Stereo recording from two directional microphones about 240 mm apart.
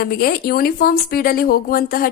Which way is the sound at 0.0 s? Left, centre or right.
Left.